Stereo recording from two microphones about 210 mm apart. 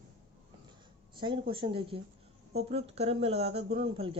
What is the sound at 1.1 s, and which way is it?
Speech, 25° right (ahead or behind).